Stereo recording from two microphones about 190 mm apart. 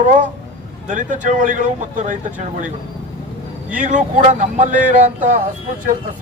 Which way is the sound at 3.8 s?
40° right (ahead or behind).